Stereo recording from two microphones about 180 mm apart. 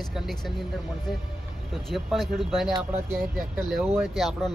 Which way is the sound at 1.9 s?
Centre (ahead or behind).